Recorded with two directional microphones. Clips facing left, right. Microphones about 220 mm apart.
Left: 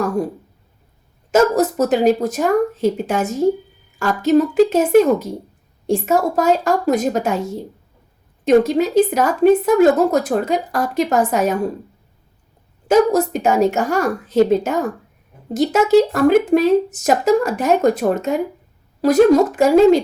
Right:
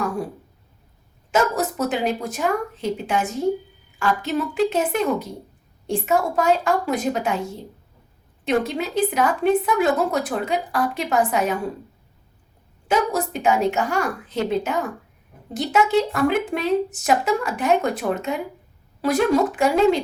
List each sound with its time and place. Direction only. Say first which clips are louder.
1.3 s speech: left 7 dB; 45° left (ahead or behind)
5.9 s speech: left 4 dB; 45° left (ahead or behind)
12.9 s speech: left 8 dB; 40° left (ahead or behind)